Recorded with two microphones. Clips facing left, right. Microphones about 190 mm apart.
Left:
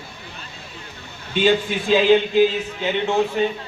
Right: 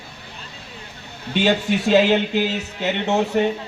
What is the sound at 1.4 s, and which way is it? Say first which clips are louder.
Speech: left 1 dB; 70° right (ahead or behind).